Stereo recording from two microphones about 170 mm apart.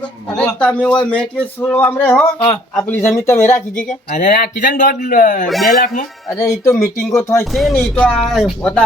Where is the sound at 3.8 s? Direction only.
50° left (ahead or behind).